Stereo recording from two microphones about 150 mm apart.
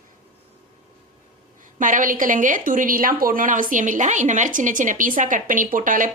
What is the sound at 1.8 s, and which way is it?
A woman's voice, 60° right (ahead or behind).